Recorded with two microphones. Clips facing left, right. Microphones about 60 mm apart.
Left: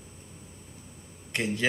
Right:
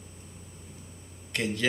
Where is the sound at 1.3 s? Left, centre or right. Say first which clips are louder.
Left 1 dB; centre.